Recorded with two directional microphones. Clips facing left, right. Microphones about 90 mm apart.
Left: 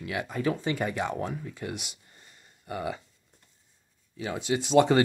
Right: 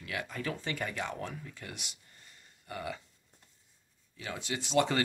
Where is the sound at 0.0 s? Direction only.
20° left (ahead or behind).